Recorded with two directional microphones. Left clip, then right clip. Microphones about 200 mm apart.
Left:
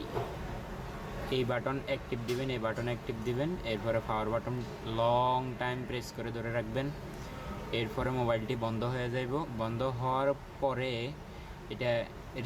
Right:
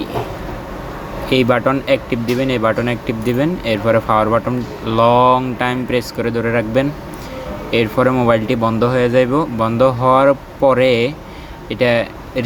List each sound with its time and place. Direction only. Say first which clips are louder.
1.3 s speech: right 19 dB; 20° right (ahead or behind)